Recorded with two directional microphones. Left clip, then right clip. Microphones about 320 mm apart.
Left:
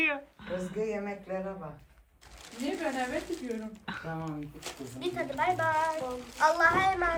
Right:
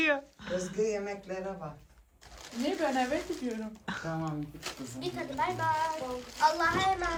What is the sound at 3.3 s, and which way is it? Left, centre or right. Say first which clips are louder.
Speech: even; right.